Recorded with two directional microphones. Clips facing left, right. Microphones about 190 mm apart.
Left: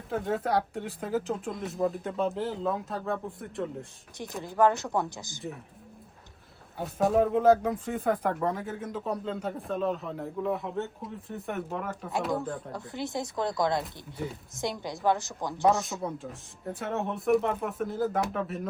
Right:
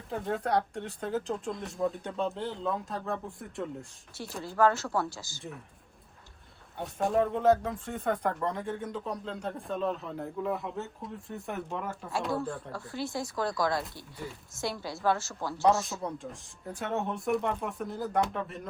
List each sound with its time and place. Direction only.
0.1 s speech: centre (ahead or behind)
4.2 s speech: 20° left (ahead or behind)
6.7 s speech: 5° left (ahead or behind)
12.3 s speech: 20° left (ahead or behind)
15.6 s speech: centre (ahead or behind)